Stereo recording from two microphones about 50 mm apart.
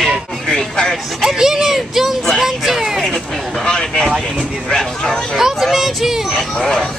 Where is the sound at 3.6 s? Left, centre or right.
Centre.